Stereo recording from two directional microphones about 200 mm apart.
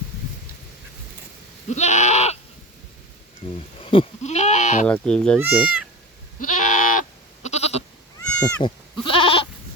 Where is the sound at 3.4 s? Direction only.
25° left (ahead or behind).